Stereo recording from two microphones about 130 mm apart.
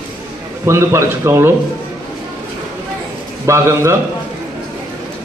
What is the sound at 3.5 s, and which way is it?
Speech, 20° right (ahead or behind).